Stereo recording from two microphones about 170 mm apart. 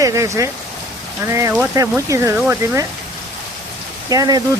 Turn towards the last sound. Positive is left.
turn(degrees=-20)  # may be behind; listen again after turning